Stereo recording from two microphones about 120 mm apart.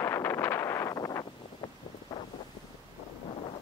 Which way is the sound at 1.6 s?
35° left (ahead or behind).